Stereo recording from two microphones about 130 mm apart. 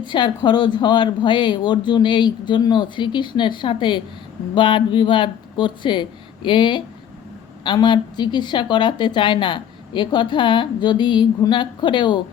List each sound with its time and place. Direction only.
0.0 s a woman's voice: 35° left (ahead or behind)